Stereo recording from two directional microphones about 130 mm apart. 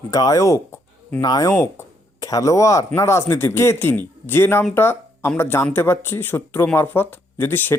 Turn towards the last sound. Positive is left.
turn(degrees=15)  # may be behind; listen again after turning